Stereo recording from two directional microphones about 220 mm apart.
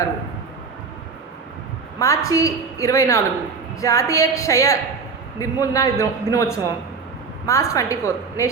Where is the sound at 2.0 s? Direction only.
15° left (ahead or behind).